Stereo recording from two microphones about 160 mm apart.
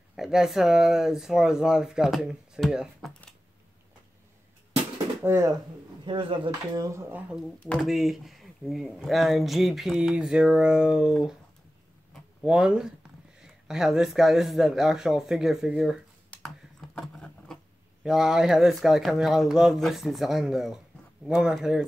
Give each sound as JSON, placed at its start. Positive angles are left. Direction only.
{"t": 0.1, "sound": "speech", "side_deg": -5}
{"t": 5.2, "sound": "speech", "side_deg": -15}
{"t": 6.0, "sound": "speech", "side_deg": -30}
{"t": 12.1, "sound": "a sound", "side_deg": 0}
{"t": 13.4, "sound": "speech", "side_deg": -5}
{"t": 16.3, "sound": "typing", "side_deg": 5}
{"t": 18.0, "sound": "speech", "side_deg": -5}